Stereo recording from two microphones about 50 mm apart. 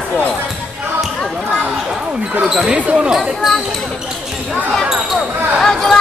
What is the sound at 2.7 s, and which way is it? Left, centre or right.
Speech, right.